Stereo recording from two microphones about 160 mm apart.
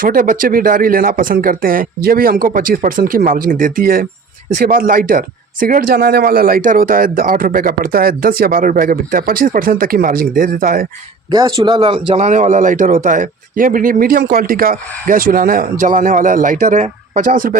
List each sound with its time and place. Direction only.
0.0 s speech: 60° right (ahead or behind)
11.3 s speech: 30° right (ahead or behind); by 17.6 s 60° right (ahead or behind)